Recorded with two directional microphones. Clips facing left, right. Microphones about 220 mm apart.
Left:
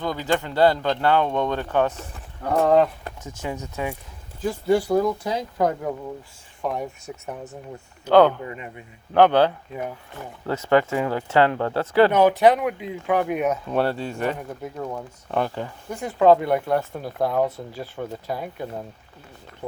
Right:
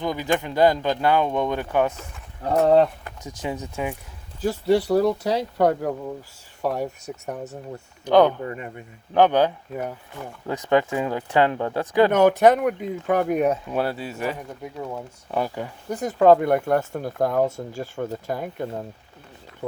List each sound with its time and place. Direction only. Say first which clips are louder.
0.0 s speech: even; 15° right (ahead or behind)
2.4 s speech: right 1 dB; 35° right (ahead or behind)
3.2 s speech: right 2 dB; 15° right (ahead or behind)
4.4 s speech: right 1 dB; 35° right (ahead or behind)
8.0 s speech: left 1 dB; 15° right (ahead or behind)
8.4 s speech: right 3 dB; 45° right (ahead or behind)
9.1 s speech: left 1 dB; 15° right (ahead or behind)
12.1 s speech: right 1 dB; 45° right (ahead or behind)
13.7 s speech: left 2 dB; 5° right (ahead or behind)
15.9 s speech: right 1 dB; 40° right (ahead or behind)